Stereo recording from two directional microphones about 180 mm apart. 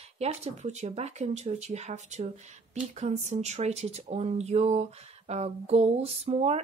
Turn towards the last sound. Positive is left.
turn(degrees=-35)  # may be behind; listen again after turning